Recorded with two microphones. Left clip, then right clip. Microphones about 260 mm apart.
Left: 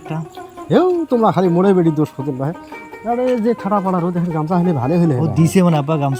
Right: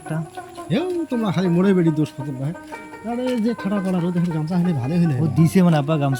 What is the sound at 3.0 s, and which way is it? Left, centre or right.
Speech, centre.